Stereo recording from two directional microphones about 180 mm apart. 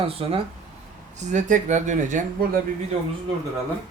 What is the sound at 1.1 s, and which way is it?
Speech, 40° right (ahead or behind).